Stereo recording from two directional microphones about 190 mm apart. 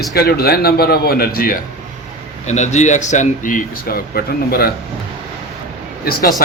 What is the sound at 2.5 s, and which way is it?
A man's voice, 40° left (ahead or behind).